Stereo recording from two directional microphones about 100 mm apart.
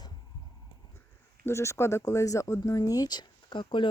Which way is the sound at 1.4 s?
30° left (ahead or behind).